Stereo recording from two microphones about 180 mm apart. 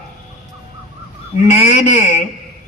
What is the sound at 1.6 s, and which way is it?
Speech, 40° left (ahead or behind).